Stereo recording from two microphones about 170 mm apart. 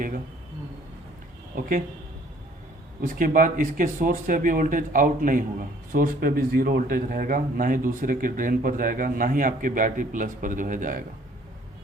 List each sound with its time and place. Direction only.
1.5 s speech: 55° right (ahead or behind)
3.0 s speech: 55° right (ahead or behind)